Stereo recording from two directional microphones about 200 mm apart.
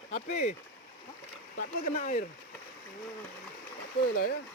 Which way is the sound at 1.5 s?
40° left (ahead or behind).